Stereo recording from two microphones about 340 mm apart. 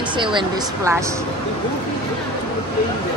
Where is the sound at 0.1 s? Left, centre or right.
Centre.